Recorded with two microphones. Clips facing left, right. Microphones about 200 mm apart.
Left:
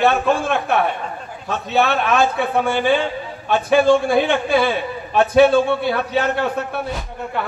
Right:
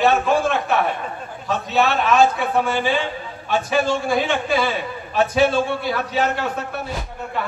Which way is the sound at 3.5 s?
55° left (ahead or behind).